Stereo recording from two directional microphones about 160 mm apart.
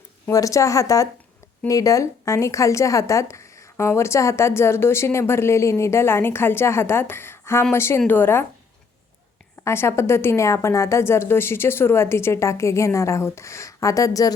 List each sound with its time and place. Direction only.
0.3 s a woman's voice: 20° left (ahead or behind)
9.6 s a woman's voice: 15° left (ahead or behind)